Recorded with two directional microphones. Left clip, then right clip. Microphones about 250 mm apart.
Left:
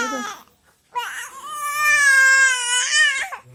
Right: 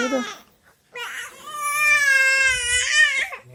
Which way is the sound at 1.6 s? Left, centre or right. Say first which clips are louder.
Left 2 dB; centre.